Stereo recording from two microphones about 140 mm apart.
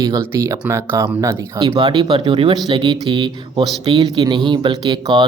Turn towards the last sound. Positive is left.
turn(degrees=-30)  # may be behind; listen again after turning